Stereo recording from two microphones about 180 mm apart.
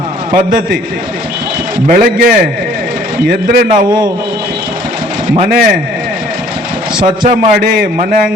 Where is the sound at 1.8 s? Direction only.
55° right (ahead or behind).